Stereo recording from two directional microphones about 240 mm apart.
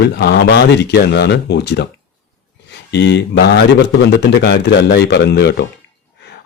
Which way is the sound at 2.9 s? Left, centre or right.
Left.